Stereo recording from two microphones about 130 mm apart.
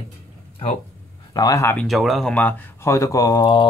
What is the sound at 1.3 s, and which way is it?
Speech, 30° left (ahead or behind).